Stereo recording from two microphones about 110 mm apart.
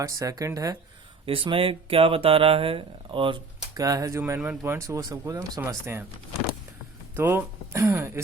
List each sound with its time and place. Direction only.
0.0 s speech: 30° right (ahead or behind)
1.2 s speech: 55° right (ahead or behind)
3.8 s speech: 35° right (ahead or behind)
7.2 s speech: 20° right (ahead or behind)